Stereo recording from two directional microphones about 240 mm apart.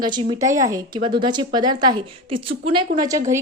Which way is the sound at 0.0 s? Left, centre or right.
Centre.